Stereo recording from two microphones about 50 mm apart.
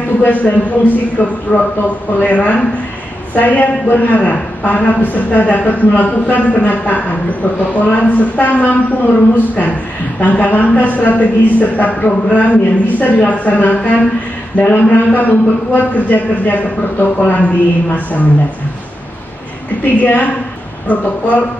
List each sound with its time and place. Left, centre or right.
0.2 s a man's voice: left
10.2 s a man's voice: left
20.0 s a man's voice: left